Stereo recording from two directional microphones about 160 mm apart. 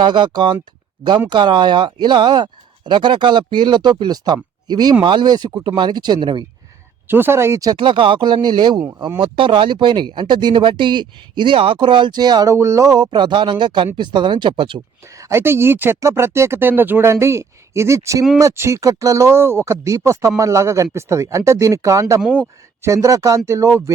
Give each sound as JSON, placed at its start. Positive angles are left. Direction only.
{"t": 0.0, "sound": "speech", "side_deg": -30}
{"t": 7.1, "sound": "speech", "side_deg": -15}
{"t": 7.8, "sound": "speech", "side_deg": -35}
{"t": 15.2, "sound": "speech", "side_deg": -15}
{"t": 22.2, "sound": "speech", "side_deg": 5}
{"t": 22.8, "sound": "speech", "side_deg": -20}